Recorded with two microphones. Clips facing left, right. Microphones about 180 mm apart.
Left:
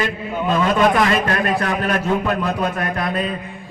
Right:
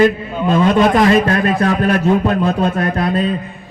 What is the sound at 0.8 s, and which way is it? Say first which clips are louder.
A man's voice: right 5 dB; 25° right (ahead or behind).